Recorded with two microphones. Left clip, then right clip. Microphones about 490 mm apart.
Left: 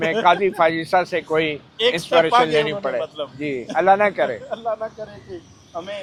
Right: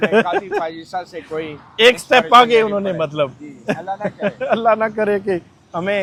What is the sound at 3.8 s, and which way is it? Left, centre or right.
Speech, left.